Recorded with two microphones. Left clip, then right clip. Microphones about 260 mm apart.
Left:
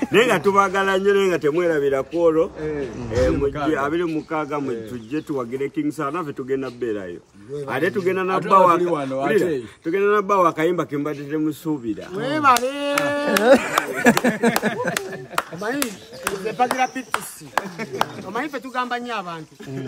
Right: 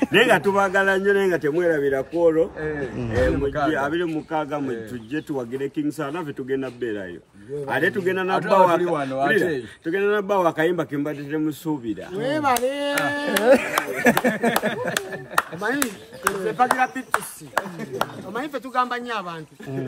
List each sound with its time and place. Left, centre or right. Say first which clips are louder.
0.1 s a man's voice: left 2 dB; centre
12.2 s speech: left 4 dB; centre
13.4 s speech: left 1 dB; left
14.7 s a man's voice: left 1 dB; centre